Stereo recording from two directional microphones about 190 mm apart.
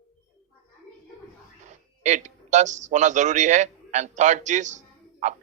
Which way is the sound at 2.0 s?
40° right (ahead or behind).